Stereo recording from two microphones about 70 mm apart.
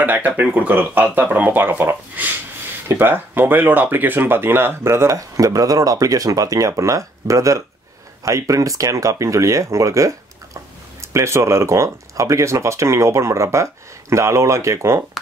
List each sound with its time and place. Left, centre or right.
0.0 s speech: right